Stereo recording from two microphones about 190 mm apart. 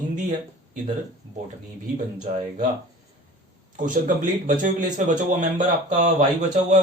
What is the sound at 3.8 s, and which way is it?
Speech, 45° right (ahead or behind).